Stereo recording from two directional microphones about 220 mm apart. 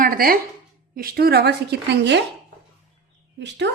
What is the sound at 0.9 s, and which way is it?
Speech, 45° right (ahead or behind).